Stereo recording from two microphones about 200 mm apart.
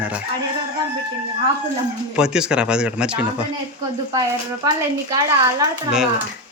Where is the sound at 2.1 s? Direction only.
5° right (ahead or behind).